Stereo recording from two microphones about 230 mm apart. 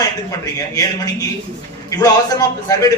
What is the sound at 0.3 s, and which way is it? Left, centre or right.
A man's voice, centre.